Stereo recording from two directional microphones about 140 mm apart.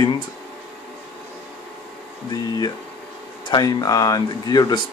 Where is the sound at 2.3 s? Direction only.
30° left (ahead or behind).